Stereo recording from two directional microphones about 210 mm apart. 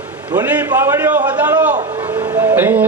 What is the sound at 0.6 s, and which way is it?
Speech, 10° right (ahead or behind).